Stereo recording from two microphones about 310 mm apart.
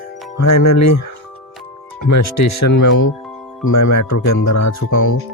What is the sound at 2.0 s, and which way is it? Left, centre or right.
Speech, left.